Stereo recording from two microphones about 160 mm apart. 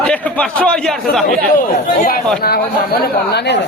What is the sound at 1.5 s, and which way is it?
Speech, 60° left (ahead or behind).